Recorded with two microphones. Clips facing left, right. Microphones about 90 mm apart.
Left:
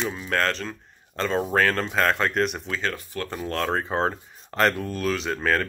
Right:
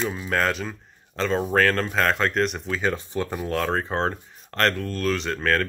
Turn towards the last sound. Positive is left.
turn(degrees=5)  # may be behind; listen again after turning